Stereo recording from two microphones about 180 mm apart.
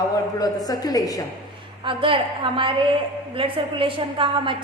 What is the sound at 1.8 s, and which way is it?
A woman's voice, 30° right (ahead or behind).